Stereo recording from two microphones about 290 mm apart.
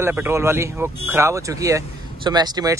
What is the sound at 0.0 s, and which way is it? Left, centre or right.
Speech, centre.